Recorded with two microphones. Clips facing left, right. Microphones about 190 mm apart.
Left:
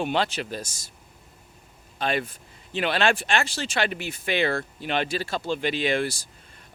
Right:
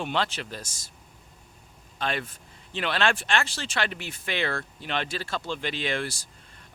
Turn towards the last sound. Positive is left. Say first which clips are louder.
# left 5 dB
turn(degrees=10)  # may be behind; listen again after turning